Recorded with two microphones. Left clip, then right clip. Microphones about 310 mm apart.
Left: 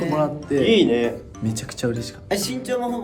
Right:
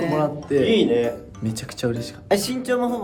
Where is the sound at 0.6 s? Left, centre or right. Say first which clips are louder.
Left 1 dB; left.